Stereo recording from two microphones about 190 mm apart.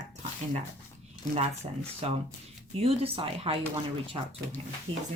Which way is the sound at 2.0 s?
35° right (ahead or behind).